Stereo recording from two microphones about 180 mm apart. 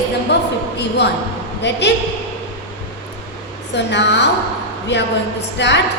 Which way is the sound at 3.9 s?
75° left (ahead or behind).